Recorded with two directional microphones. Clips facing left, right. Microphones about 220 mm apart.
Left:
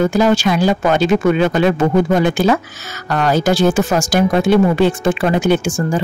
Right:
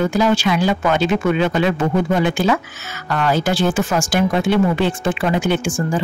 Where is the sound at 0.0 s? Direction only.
45° left (ahead or behind).